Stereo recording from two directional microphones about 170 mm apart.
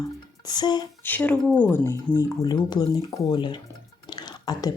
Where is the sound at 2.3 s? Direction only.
25° left (ahead or behind).